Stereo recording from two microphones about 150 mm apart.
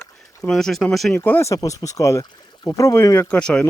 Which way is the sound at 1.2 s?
15° left (ahead or behind).